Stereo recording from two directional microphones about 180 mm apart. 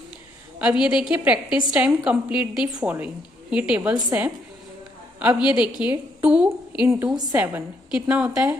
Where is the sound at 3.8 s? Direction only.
20° right (ahead or behind).